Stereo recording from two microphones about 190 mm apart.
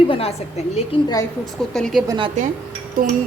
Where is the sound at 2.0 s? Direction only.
25° right (ahead or behind).